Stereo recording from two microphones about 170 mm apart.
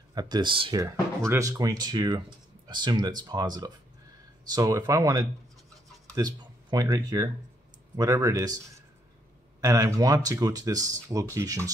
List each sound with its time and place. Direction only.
0.1 s a man's voice: 25° right (ahead or behind)